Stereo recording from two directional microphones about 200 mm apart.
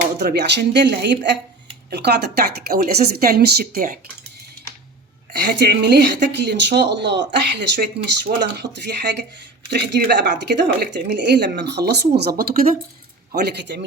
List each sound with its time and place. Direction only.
0.2 s speech: 55° right (ahead or behind)
5.3 s speech: 55° right (ahead or behind)